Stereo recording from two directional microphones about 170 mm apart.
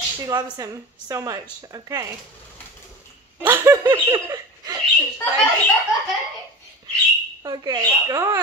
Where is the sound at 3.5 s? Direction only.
15° right (ahead or behind).